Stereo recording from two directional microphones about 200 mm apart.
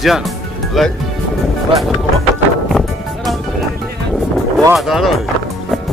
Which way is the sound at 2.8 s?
Centre (ahead or behind).